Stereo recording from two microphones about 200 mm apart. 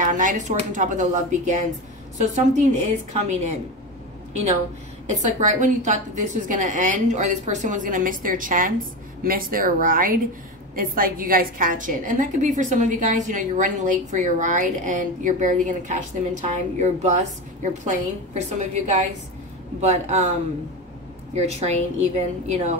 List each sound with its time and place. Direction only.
0.0 s a woman's voice: 40° right (ahead or behind)
5.0 s a woman's voice: 35° right (ahead or behind)
21.4 s a woman's voice: 35° right (ahead or behind)